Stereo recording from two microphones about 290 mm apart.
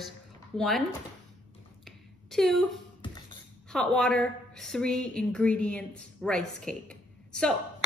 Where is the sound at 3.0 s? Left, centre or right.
Centre.